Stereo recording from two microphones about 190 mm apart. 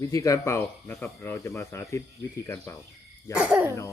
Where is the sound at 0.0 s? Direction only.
15° left (ahead or behind).